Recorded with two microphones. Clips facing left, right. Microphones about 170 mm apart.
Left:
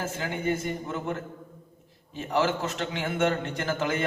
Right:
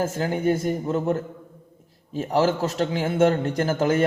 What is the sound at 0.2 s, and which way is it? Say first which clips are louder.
Speech: right 4 dB; 40° right (ahead or behind).